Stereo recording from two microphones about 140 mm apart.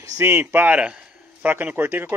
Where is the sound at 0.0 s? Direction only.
20° right (ahead or behind).